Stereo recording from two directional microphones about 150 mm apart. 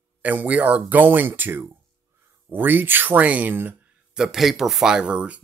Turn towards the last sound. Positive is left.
turn(degrees=-10)  # may be behind; listen again after turning